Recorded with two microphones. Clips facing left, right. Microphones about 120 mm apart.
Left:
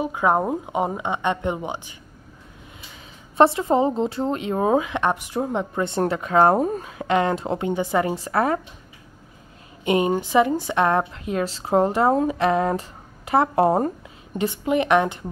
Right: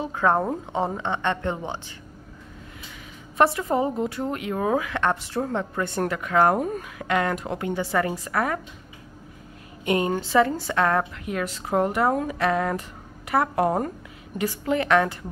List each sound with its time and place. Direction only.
0.0 s a woman's voice: 15° left (ahead or behind)
3.3 s a woman's voice: 25° left (ahead or behind)
9.8 s a woman's voice: 20° left (ahead or behind)